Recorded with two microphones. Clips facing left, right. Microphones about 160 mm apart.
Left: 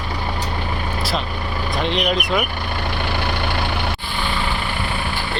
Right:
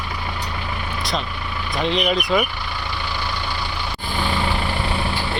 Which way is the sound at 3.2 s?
65° left (ahead or behind).